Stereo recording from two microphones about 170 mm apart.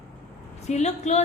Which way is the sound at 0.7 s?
40° left (ahead or behind).